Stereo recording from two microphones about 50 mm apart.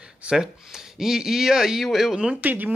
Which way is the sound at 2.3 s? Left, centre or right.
Right.